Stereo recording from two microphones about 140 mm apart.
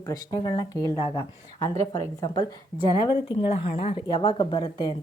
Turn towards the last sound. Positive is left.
turn(degrees=35)  # may be behind; listen again after turning